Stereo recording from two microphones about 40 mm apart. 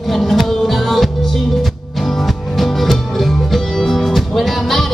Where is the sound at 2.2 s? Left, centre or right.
Centre.